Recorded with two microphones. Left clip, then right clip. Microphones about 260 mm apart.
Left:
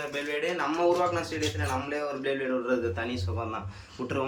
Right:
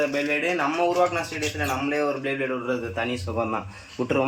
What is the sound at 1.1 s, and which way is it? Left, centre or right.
Speech, right.